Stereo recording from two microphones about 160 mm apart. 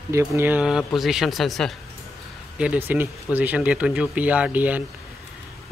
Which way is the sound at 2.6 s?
10° right (ahead or behind).